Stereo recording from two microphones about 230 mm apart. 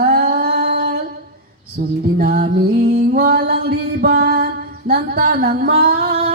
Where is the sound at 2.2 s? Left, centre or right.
Right.